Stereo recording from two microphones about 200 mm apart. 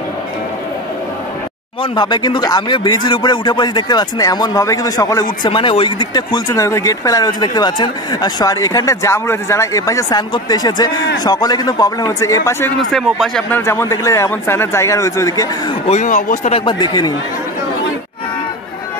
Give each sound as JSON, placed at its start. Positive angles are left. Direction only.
{"t": 1.8, "sound": "a man's voice", "side_deg": 20}
{"t": 12.9, "sound": "speech", "side_deg": 0}
{"t": 13.6, "sound": "a man's voice", "side_deg": 15}
{"t": 15.9, "sound": "speech", "side_deg": 35}
{"t": 16.5, "sound": "speech", "side_deg": 25}